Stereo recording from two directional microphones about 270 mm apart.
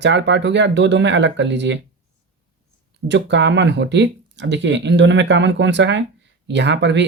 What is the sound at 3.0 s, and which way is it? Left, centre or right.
Speech, right.